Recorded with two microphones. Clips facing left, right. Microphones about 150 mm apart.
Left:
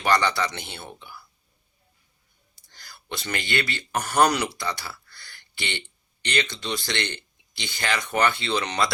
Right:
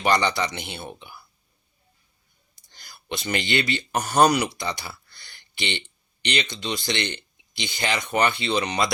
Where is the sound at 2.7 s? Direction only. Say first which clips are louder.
Right 3 dB; 15° right (ahead or behind).